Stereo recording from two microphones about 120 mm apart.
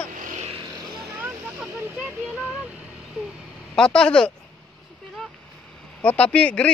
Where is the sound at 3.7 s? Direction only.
5° left (ahead or behind).